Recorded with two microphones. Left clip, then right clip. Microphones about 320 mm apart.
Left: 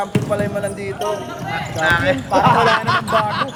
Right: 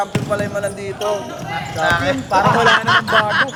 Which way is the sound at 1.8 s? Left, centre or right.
Centre.